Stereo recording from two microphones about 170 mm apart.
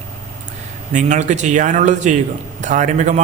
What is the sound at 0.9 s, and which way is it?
A man's voice, 45° right (ahead or behind).